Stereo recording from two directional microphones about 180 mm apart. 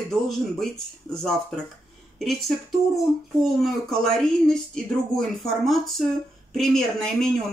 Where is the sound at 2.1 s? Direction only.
Centre (ahead or behind).